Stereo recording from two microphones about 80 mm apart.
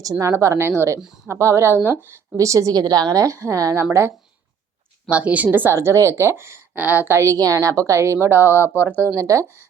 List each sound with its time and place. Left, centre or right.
0.0 s a woman's voice: right
5.0 s a woman's voice: centre
5.7 s a woman's voice: right
7.2 s a woman's voice: right
9.1 s a woman's voice: right